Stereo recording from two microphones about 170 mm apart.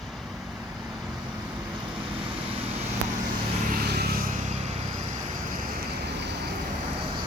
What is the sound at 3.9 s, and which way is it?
Vehicle, 70° right (ahead or behind).